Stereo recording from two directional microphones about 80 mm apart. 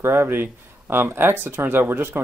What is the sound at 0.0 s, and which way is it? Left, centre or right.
Speech, right.